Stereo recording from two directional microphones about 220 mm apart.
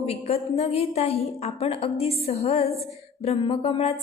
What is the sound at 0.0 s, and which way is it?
A woman's voice, 30° left (ahead or behind).